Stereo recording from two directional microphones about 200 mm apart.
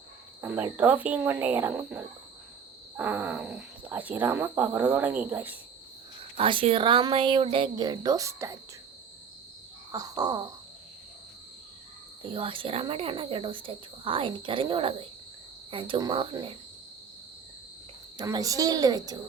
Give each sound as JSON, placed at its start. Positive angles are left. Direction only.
{"t": 0.4, "sound": "speech", "side_deg": -10}
{"t": 6.3, "sound": "speech", "side_deg": -25}
{"t": 9.9, "sound": "speech", "side_deg": -20}
{"t": 12.2, "sound": "speech", "side_deg": -25}
{"t": 18.2, "sound": "speech", "side_deg": -20}